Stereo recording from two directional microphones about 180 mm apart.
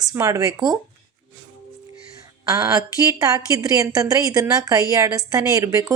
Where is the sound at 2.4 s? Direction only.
20° right (ahead or behind).